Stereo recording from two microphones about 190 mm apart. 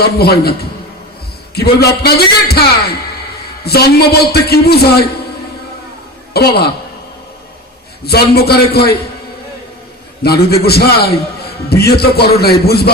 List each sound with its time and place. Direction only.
0.0 s a man's voice: 55° left (ahead or behind)
6.3 s a man's voice: 55° left (ahead or behind)
8.0 s a man's voice: 55° left (ahead or behind)
10.2 s a man's voice: 55° left (ahead or behind)